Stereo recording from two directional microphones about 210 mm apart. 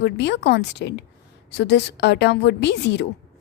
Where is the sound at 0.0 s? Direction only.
55° left (ahead or behind).